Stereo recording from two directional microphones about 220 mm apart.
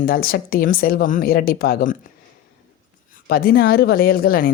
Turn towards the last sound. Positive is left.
turn(degrees=40)  # may be behind; listen again after turning